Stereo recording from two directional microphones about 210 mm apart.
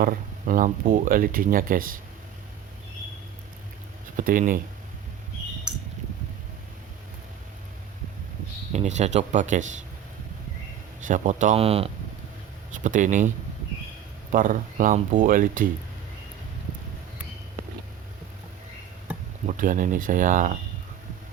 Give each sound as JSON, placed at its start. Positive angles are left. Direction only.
{"t": 0.0, "sound": "speech", "side_deg": -40}
{"t": 4.2, "sound": "speech", "side_deg": -40}
{"t": 8.7, "sound": "speech", "side_deg": -35}
{"t": 11.0, "sound": "speech", "side_deg": -35}
{"t": 19.5, "sound": "speech", "side_deg": -40}